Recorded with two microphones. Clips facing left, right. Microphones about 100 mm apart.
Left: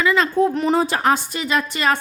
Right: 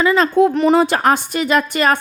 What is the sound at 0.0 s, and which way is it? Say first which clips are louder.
Speech: right 4 dB; 40° right (ahead or behind).